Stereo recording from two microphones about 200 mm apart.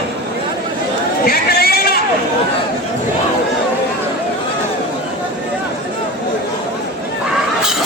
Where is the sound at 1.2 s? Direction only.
50° left (ahead or behind).